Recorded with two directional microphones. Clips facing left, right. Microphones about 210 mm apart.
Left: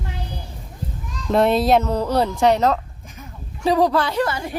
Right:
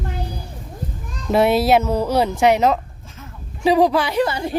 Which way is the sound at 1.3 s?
5° right (ahead or behind).